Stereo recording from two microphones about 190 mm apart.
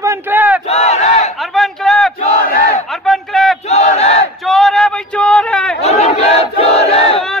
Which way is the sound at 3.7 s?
35° left (ahead or behind).